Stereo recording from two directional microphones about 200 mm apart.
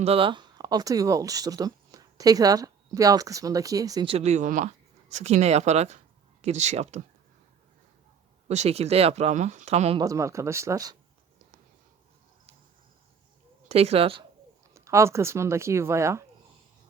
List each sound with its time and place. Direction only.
0.0 s speech: 30° right (ahead or behind)
8.4 s speech: 35° right (ahead or behind)
10.0 s speech: 15° right (ahead or behind)
13.7 s speech: 30° right (ahead or behind)
14.7 s speech: 15° right (ahead or behind)